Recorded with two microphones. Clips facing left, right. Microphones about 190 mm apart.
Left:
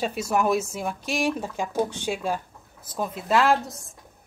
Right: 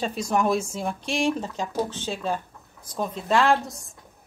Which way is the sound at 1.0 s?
30° right (ahead or behind).